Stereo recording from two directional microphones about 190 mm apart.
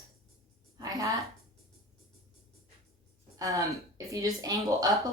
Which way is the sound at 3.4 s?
15° right (ahead or behind).